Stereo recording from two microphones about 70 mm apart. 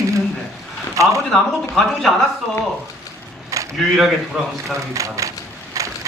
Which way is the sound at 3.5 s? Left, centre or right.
Right.